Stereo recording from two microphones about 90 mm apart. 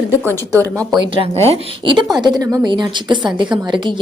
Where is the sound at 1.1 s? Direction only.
90° right.